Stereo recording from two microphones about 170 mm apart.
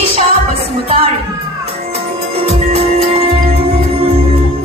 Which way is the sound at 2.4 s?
40° right (ahead or behind).